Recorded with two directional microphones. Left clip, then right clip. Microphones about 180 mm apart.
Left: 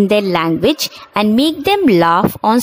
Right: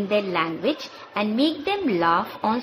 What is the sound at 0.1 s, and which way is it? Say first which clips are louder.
A woman's voice: left 9 dB; 60° left (ahead or behind).